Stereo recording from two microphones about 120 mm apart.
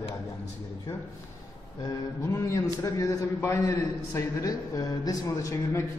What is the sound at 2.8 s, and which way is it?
A man's voice, 20° left (ahead or behind).